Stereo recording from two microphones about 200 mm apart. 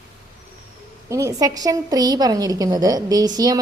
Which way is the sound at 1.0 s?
15° right (ahead or behind).